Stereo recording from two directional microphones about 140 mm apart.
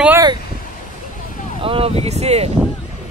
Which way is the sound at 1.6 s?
40° right (ahead or behind).